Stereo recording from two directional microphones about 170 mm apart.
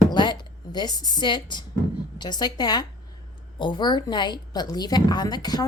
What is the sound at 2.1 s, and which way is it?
A woman's voice, 25° left (ahead or behind).